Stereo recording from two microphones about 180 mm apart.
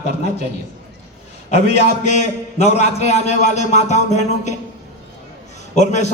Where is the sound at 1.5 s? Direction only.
35° left (ahead or behind).